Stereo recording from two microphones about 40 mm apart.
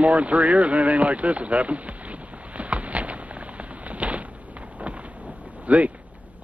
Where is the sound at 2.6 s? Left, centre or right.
Right.